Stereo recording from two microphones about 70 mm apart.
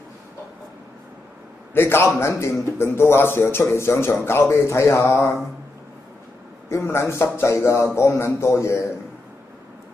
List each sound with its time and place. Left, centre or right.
1.7 s speech: left
6.7 s a man's voice: left